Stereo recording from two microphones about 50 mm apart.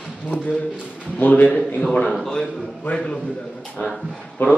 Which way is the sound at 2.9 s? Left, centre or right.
Left.